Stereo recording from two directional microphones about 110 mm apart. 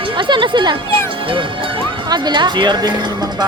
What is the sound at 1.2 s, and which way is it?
Speech, 50° right (ahead or behind).